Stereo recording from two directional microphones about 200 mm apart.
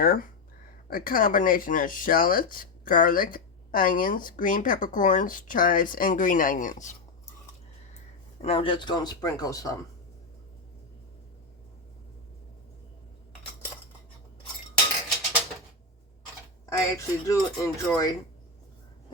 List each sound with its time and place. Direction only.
0.0 s speech: 45° left (ahead or behind)
8.4 s speech: 30° left (ahead or behind)
16.6 s speech: 15° left (ahead or behind)